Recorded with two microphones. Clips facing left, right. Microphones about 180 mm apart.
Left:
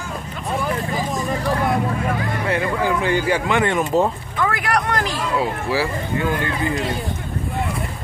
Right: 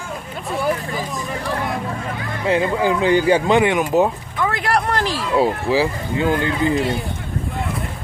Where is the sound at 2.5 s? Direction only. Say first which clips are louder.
Right 4 dB; 20° right (ahead or behind).